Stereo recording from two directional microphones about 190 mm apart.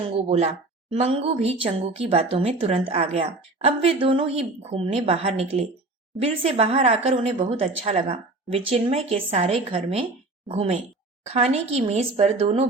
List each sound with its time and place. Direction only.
0.2 s speech: 35° right (ahead or behind)